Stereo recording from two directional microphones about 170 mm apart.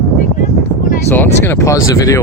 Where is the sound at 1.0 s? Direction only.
15° left (ahead or behind).